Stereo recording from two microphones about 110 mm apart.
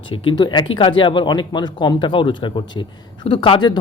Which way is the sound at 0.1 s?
45° left (ahead or behind).